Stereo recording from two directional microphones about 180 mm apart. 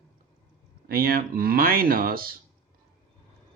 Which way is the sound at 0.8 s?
55° right (ahead or behind).